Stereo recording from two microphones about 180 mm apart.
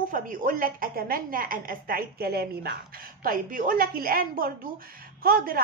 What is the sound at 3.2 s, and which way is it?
A woman's voice, 50° right (ahead or behind).